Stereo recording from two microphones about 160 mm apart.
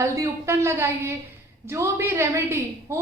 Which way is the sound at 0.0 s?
20° right (ahead or behind).